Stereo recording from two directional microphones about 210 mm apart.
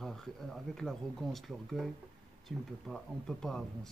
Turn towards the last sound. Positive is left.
turn(degrees=0)  # may be behind; listen again after turning